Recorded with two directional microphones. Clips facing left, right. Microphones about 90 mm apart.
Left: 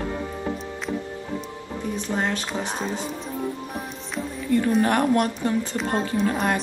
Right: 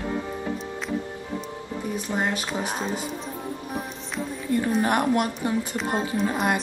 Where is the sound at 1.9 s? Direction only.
10° right (ahead or behind).